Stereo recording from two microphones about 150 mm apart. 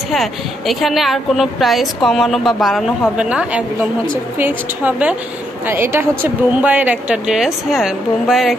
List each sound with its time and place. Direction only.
0.1 s a woman's voice: centre (ahead or behind)